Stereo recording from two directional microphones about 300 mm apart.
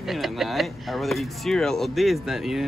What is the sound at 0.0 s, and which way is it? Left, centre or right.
Speech, centre.